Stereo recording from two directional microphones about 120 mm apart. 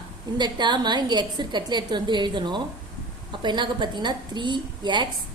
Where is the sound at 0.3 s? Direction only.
40° right (ahead or behind).